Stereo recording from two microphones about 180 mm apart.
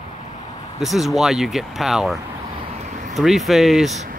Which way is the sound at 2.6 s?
40° right (ahead or behind).